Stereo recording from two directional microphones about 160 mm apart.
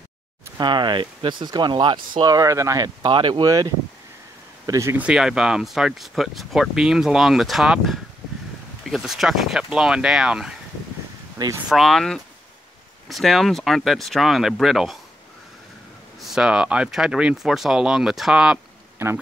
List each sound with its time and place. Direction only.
0.6 s speech: 30° right (ahead or behind); by 10.5 s 5° right (ahead or behind)
11.3 s speech: 25° right (ahead or behind)
11.7 s speech: centre (ahead or behind)
16.2 s speech: 5° right (ahead or behind)